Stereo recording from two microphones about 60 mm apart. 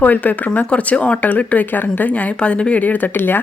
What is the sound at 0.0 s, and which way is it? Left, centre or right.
Speech, left.